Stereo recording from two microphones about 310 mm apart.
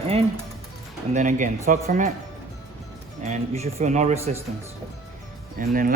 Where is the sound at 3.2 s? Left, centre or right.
Right.